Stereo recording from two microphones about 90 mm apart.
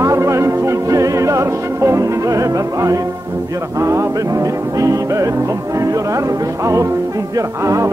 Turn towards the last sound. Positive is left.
turn(degrees=-35)  # may be behind; listen again after turning